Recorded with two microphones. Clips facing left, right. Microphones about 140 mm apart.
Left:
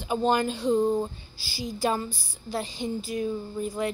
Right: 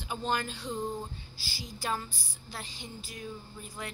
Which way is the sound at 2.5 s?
20° left (ahead or behind).